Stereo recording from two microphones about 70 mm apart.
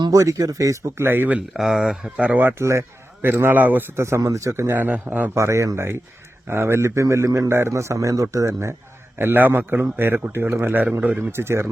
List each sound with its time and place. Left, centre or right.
0.2 s a man's voice: right
0.9 s a man's voice: right
1.5 s speech: centre
1.8 s speech: centre
2.6 s a man's voice: right
3.9 s a man's voice: right
4.8 s speech: right
5.3 s a man's voice: right
7.7 s a man's voice: right
9.1 s a man's voice: right
11.3 s a man's voice: right